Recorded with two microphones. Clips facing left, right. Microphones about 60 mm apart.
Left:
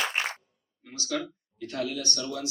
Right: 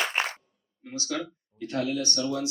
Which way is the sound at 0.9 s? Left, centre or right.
Right.